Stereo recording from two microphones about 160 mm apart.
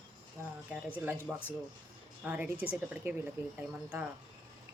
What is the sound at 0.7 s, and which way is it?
Speech, 10° right (ahead or behind).